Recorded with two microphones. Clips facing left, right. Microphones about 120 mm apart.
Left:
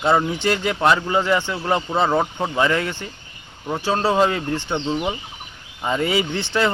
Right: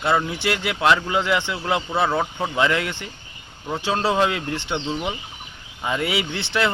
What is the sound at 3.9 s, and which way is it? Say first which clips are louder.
Speech: left 2 dB; 10° left (ahead or behind).